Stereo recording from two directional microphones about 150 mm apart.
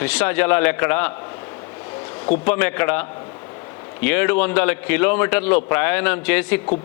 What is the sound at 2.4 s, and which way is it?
A man's voice, 10° left (ahead or behind).